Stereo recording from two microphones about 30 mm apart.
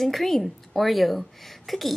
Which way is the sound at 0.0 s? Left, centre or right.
Centre.